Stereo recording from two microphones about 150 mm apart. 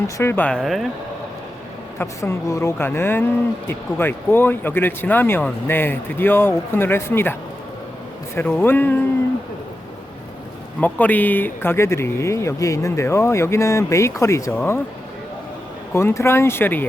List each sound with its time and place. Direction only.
0.2 s speech: 15° left (ahead or behind)
2.0 s speech: 20° left (ahead or behind)
8.4 s speech: 15° left (ahead or behind)
10.8 s speech: 10° left (ahead or behind)
15.9 s speech: 15° left (ahead or behind)